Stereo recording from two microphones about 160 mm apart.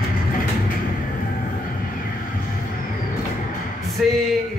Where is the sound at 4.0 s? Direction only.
Centre (ahead or behind).